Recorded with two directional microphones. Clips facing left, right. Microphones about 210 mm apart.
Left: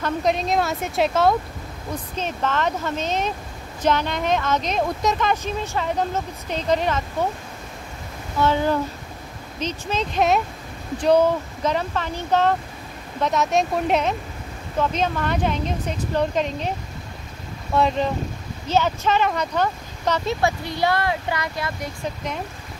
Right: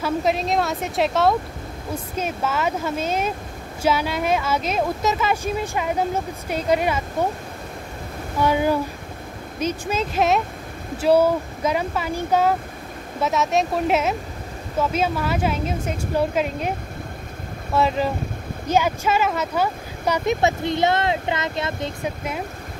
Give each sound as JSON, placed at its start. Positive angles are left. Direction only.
{"t": 0.0, "sound": "a woman's voice", "side_deg": -5}
{"t": 8.4, "sound": "a woman's voice", "side_deg": -10}
{"t": 17.7, "sound": "a woman's voice", "side_deg": -5}
{"t": 20.4, "sound": "speech", "side_deg": -20}
{"t": 22.0, "sound": "speech", "side_deg": -5}